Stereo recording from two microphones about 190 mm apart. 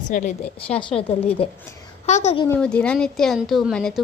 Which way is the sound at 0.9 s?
30° left (ahead or behind).